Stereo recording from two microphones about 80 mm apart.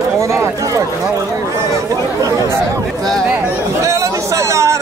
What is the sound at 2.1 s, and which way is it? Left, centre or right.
Chatter, right.